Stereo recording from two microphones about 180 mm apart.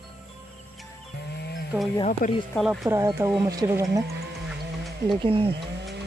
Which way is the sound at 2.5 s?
Centre (ahead or behind).